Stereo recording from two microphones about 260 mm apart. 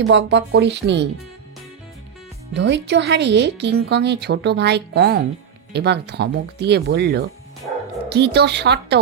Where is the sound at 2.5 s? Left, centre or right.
Right.